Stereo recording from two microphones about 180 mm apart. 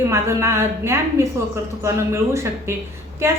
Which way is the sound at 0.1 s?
15° right (ahead or behind).